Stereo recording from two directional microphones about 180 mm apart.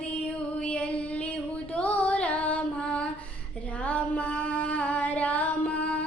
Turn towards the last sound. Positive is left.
turn(degrees=5)  # may be behind; listen again after turning